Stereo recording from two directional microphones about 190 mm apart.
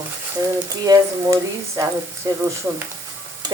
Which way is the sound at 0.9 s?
15° right (ahead or behind).